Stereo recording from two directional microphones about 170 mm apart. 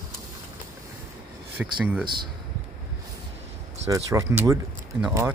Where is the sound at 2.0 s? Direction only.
25° right (ahead or behind).